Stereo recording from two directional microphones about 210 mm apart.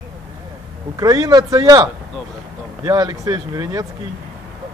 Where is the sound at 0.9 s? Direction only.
15° right (ahead or behind).